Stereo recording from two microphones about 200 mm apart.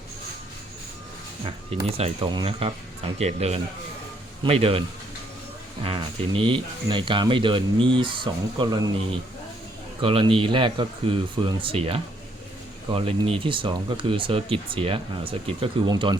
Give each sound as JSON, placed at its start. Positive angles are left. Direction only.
{"t": 1.5, "sound": "speech", "side_deg": -30}
{"t": 5.8, "sound": "speech", "side_deg": -30}